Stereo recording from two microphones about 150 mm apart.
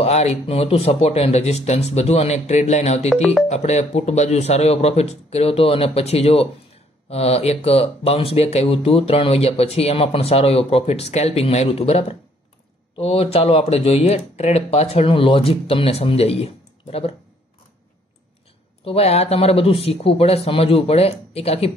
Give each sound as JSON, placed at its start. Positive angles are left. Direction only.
{"t": 0.0, "sound": "speech", "side_deg": 45}
{"t": 18.9, "sound": "speech", "side_deg": 40}